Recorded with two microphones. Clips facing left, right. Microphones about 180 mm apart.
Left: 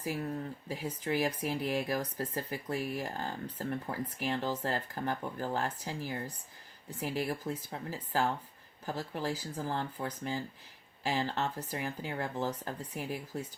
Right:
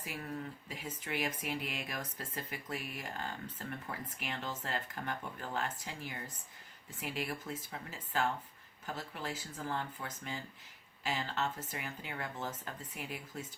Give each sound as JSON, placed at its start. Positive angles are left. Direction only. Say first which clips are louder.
{"t": 0.7, "sound": "speech", "louder": "left 9 dB", "side_deg": 35}